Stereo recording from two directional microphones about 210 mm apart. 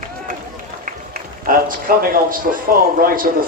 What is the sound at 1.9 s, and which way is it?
A man's voice, 45° right (ahead or behind).